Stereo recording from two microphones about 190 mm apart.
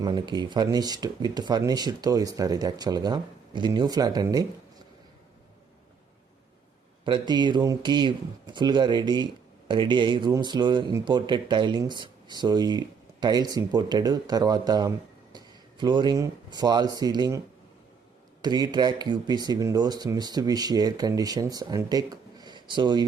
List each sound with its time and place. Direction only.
0.0 s speech: 20° right (ahead or behind)
7.0 s speech: 25° right (ahead or behind)
18.4 s speech: 20° right (ahead or behind)